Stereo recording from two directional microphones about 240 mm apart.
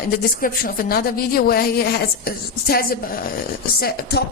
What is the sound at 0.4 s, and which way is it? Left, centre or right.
A woman's voice, left.